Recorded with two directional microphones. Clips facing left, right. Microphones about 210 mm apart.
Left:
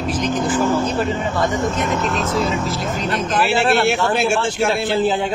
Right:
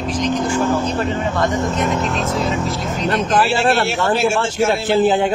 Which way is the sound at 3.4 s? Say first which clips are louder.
Left 2 dB; 60° left (ahead or behind).